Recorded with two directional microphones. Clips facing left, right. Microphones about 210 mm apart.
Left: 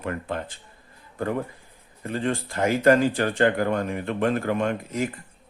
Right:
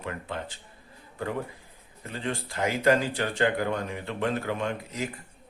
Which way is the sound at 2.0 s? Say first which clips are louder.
Left 6 dB; 50° left (ahead or behind).